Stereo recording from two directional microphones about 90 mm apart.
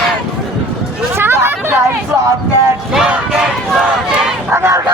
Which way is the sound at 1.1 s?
25° right (ahead or behind).